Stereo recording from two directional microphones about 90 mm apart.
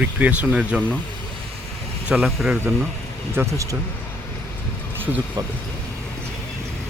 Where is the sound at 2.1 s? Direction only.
15° right (ahead or behind).